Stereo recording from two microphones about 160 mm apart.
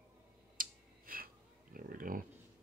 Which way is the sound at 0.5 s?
60° right (ahead or behind).